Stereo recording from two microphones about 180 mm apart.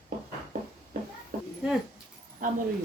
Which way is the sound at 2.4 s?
50° right (ahead or behind).